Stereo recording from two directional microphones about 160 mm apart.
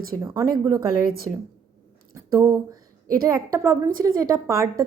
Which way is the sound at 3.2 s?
20° right (ahead or behind).